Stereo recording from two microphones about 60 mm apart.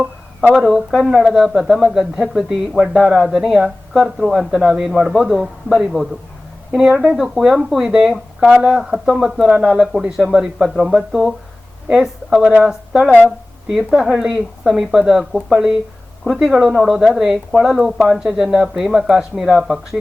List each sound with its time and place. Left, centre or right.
0.5 s speech: centre
3.6 s a woman's voice: centre